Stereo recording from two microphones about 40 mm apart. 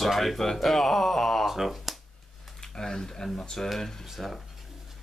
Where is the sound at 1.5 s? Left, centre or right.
Centre.